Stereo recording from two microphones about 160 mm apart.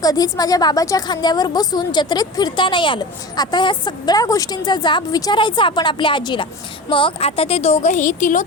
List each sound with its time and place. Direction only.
0.0 s a woman's voice: 25° left (ahead or behind); by 8.4 s 50° left (ahead or behind)